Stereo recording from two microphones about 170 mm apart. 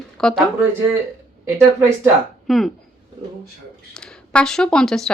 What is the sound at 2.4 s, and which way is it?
Speech, centre (ahead or behind).